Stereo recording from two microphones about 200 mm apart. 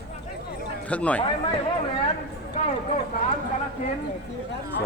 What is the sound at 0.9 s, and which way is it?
Speech, 5° left (ahead or behind).